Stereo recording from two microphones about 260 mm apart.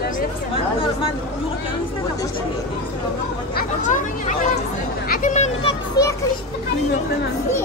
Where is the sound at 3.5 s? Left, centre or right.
Left.